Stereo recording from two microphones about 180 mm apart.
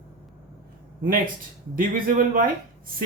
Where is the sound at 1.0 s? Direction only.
50° right (ahead or behind).